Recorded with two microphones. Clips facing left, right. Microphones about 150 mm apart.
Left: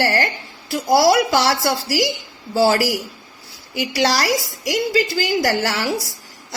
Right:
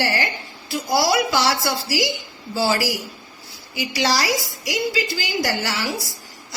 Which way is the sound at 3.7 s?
55° left (ahead or behind).